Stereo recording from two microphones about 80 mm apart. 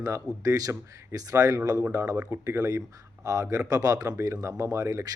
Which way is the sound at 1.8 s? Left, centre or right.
Right.